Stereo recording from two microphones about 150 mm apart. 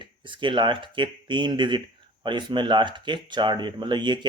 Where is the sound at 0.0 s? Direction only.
35° right (ahead or behind).